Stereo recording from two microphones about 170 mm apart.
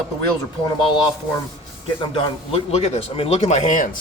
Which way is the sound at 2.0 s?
35° left (ahead or behind).